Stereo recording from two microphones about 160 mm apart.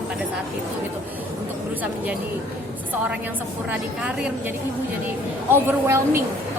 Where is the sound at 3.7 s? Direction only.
10° right (ahead or behind).